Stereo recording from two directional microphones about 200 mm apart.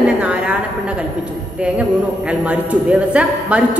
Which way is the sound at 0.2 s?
5° right (ahead or behind).